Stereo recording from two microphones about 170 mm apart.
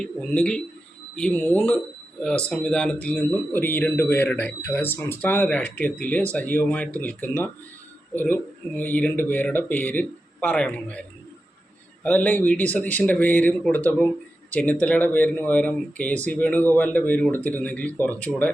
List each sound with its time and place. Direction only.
0.0 s speech: 5° left (ahead or behind)
12.0 s speech: 10° left (ahead or behind)